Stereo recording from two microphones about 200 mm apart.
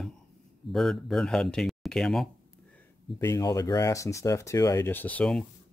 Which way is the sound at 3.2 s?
15° left (ahead or behind).